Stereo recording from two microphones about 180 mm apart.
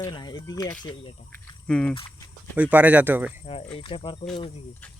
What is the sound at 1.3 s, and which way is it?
Speech, 5° left (ahead or behind).